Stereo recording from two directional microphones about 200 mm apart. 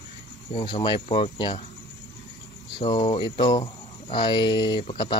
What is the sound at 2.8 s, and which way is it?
Speech, 20° left (ahead or behind).